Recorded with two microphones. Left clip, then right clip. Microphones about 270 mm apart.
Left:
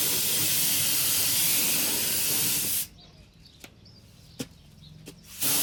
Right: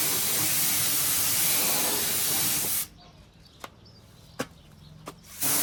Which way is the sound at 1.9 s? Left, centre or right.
Centre.